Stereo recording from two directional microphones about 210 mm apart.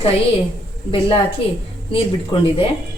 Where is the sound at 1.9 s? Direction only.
25° left (ahead or behind).